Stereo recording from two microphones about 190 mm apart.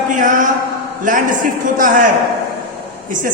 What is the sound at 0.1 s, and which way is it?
A man's voice, 45° right (ahead or behind).